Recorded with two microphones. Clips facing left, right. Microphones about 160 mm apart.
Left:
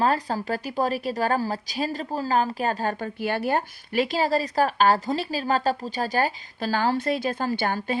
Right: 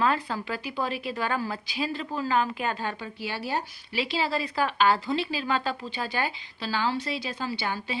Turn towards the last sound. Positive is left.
turn(degrees=50)  # may be behind; listen again after turning